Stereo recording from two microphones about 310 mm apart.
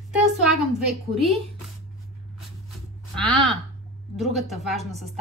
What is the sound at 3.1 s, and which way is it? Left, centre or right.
Speech, centre.